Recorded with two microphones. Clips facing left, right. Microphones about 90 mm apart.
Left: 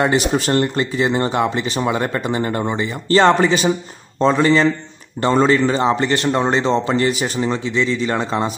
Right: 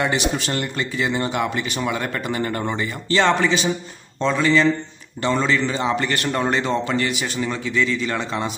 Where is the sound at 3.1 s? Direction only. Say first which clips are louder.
Left 5 dB; 40° left (ahead or behind).